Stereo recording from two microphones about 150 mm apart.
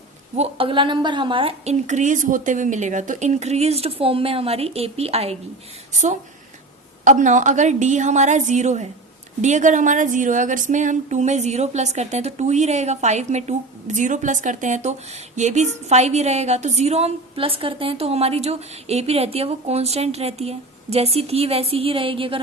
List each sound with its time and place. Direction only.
0.3 s a woman's voice: 35° right (ahead or behind)
1.9 s a woman's voice: 55° right (ahead or behind)
5.9 s a woman's voice: 55° right (ahead or behind); by 22.4 s 35° right (ahead or behind)